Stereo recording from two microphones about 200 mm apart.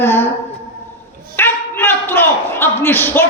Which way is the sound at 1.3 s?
10° left (ahead or behind).